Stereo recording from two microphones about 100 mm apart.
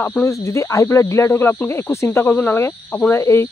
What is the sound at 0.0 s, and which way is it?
Speech, 25° left (ahead or behind).